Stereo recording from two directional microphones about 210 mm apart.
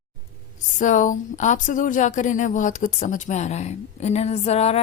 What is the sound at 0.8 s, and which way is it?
Speech, 35° left (ahead or behind).